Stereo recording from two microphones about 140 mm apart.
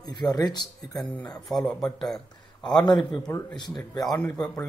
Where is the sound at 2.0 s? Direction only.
Centre (ahead or behind).